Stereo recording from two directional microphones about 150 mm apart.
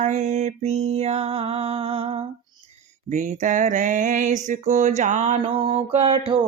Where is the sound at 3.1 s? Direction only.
60° right (ahead or behind).